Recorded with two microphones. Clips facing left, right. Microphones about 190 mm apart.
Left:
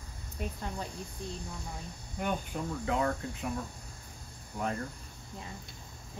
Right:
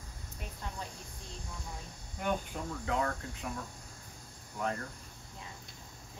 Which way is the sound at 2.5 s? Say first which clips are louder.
Left 3 dB; 10° left (ahead or behind).